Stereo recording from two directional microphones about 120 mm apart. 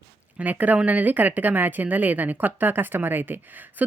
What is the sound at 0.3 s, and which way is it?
Speech, 15° right (ahead or behind).